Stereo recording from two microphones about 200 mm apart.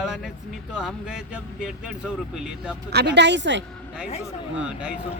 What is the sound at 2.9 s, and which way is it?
Speech, 55° right (ahead or behind).